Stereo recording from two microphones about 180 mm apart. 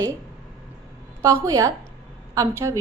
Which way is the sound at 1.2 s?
15° right (ahead or behind).